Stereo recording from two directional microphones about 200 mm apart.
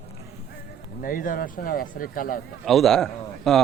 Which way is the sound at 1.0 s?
45° left (ahead or behind).